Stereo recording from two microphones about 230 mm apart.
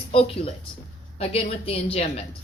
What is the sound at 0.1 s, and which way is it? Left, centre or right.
Speech, left.